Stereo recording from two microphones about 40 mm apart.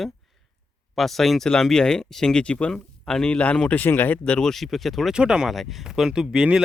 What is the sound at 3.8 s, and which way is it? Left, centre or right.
Speech, left.